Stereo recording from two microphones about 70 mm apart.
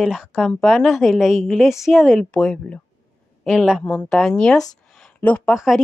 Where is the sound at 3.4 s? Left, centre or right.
Centre.